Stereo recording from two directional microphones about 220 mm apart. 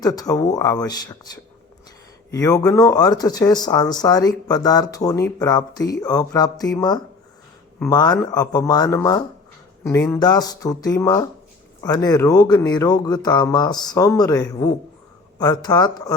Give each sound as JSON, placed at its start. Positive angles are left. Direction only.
{"t": 0.0, "sound": "speech", "side_deg": 15}
{"t": 2.3, "sound": "speech", "side_deg": 15}